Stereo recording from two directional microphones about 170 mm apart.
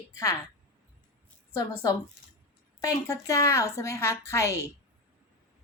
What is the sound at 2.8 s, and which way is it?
A woman's voice, 20° left (ahead or behind).